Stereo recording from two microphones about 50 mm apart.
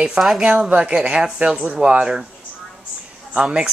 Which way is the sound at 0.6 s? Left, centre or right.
Right.